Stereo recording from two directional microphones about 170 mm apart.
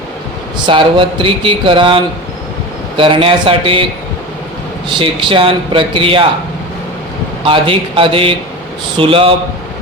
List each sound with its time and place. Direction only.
0.6 s speech: 30° right (ahead or behind)
3.0 s speech: 30° right (ahead or behind)
4.9 s speech: 30° right (ahead or behind)
7.4 s speech: 30° right (ahead or behind)